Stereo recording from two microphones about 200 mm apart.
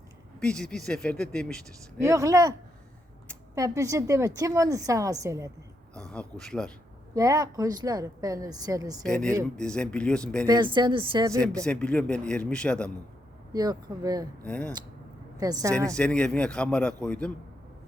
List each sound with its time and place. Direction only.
0.3 s a man's voice: 5° left (ahead or behind)
2.0 s a woman's voice: 15° right (ahead or behind)
6.1 s a man's voice: 5° left (ahead or behind)
7.1 s a woman's voice: 15° right (ahead or behind)
9.0 s a man's voice: 5° left (ahead or behind)
10.4 s speech: 20° right (ahead or behind)
11.6 s a man's voice: 5° left (ahead or behind)
13.5 s speech: 20° right (ahead or behind)
14.4 s a man's voice: 5° left (ahead or behind)
15.4 s speech: 20° right (ahead or behind)
16.0 s a man's voice: 5° left (ahead or behind)